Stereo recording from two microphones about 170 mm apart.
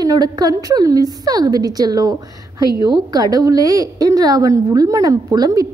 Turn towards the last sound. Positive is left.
turn(degrees=-20)  # may be behind; listen again after turning